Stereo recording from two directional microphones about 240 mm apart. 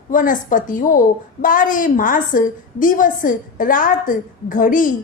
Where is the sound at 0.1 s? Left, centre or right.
Left.